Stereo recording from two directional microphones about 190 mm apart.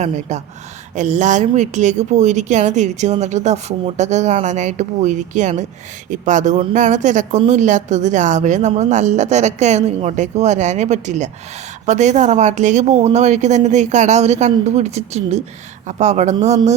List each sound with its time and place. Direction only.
0.0 s speech: 35° right (ahead or behind)